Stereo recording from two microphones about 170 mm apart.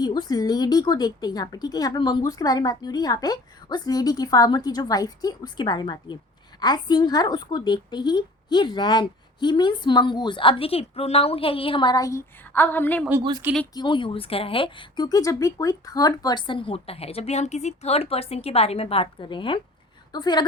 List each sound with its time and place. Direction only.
0.0 s a woman's voice: 25° left (ahead or behind)
13.7 s a woman's voice: 30° left (ahead or behind)